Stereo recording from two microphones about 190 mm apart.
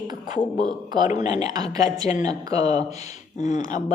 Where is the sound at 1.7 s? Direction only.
20° right (ahead or behind).